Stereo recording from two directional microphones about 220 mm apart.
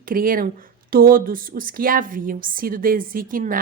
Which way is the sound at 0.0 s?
40° right (ahead or behind).